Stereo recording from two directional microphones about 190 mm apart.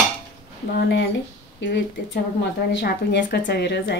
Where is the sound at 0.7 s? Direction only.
65° left (ahead or behind).